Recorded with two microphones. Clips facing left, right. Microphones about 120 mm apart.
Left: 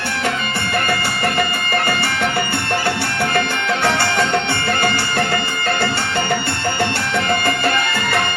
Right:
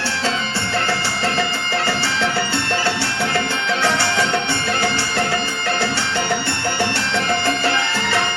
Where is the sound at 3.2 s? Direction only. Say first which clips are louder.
Left 3 dB; 55° left (ahead or behind).